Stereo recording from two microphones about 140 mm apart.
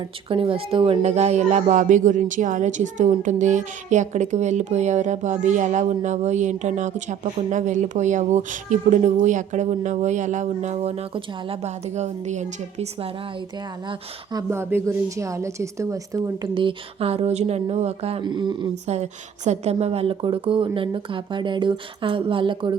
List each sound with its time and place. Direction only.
0.0 s a woman's voice: 40° right (ahead or behind)
13.8 s a woman's voice: 35° right (ahead or behind)
14.5 s a woman's voice: 20° right (ahead or behind)
16.6 s speech: 40° right (ahead or behind)
18.2 s a woman's voice: 35° right (ahead or behind)
19.5 s a woman's voice: 50° right (ahead or behind)